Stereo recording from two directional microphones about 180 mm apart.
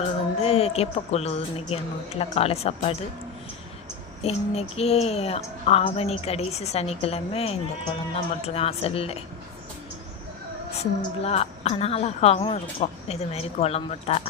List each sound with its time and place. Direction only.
0.0 s speech: 35° left (ahead or behind)
4.2 s a woman's voice: 35° left (ahead or behind)
10.8 s a woman's voice: 35° left (ahead or behind)